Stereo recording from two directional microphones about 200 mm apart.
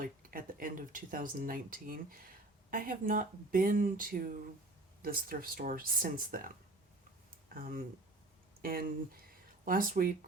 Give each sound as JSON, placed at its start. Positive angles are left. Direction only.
{"t": 0.0, "sound": "speech", "side_deg": -45}
{"t": 7.5, "sound": "speech", "side_deg": -45}